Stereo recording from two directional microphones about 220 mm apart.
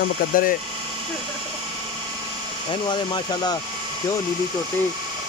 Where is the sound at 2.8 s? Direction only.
20° left (ahead or behind).